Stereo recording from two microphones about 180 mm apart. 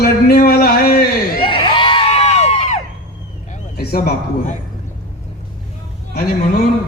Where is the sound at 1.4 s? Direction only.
30° left (ahead or behind).